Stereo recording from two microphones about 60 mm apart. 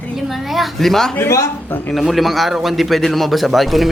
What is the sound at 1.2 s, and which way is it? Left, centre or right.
Speech, left.